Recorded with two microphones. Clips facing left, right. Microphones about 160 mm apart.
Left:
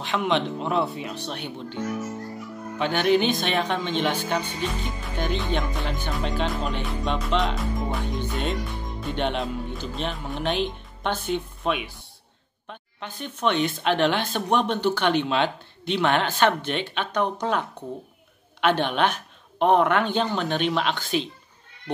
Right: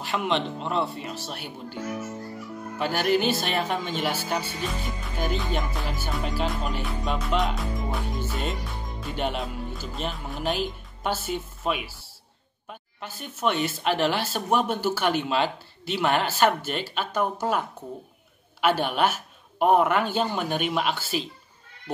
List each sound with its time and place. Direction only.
0.0 s speech: 5° right (ahead or behind)
2.8 s a man's voice: 5° right (ahead or behind)